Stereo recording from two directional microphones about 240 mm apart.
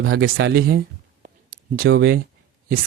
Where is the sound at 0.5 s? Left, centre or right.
Right.